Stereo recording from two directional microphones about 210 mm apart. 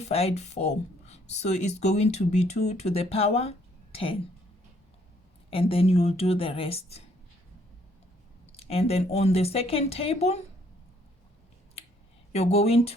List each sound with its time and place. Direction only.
0.0 s speech: 30° left (ahead or behind)
5.5 s speech: 25° left (ahead or behind)
8.5 s speech: 30° left (ahead or behind)
12.3 s speech: 30° left (ahead or behind)